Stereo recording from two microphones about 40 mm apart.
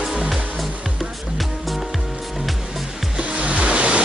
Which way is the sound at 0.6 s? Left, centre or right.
Centre.